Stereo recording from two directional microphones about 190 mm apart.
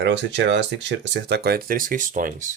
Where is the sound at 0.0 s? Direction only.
65° right (ahead or behind).